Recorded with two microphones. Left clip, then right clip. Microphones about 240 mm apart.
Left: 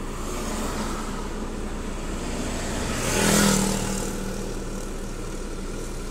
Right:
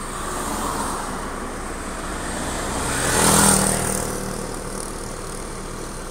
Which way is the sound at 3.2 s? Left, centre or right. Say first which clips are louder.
Right 4 dB; right.